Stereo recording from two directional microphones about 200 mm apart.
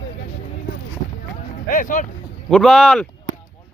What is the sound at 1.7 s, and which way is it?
Speech, 40° left (ahead or behind).